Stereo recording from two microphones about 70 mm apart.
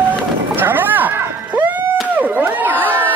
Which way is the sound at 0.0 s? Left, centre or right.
Right.